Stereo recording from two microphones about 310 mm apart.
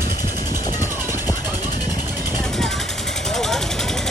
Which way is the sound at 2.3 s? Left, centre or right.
Centre.